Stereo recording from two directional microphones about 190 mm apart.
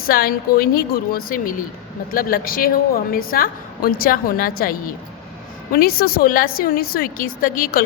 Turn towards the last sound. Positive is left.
turn(degrees=50)  # may be behind; listen again after turning